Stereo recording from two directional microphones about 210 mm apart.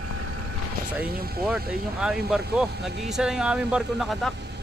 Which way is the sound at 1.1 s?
45° right (ahead or behind).